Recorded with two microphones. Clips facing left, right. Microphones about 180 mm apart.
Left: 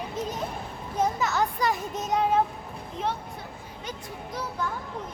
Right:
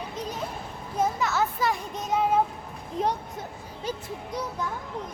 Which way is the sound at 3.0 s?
35° right (ahead or behind).